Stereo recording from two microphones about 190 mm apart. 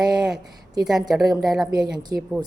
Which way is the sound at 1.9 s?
20° right (ahead or behind).